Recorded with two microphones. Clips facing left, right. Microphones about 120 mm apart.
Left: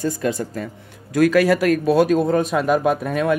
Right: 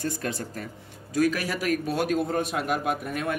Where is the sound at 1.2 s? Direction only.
90° left.